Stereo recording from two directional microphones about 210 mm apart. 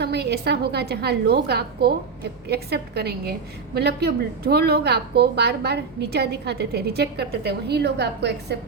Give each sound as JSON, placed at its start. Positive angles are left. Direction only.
{"t": 0.0, "sound": "a woman's voice", "side_deg": -50}